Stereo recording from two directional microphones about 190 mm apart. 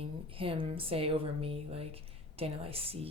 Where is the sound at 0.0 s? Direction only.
30° right (ahead or behind).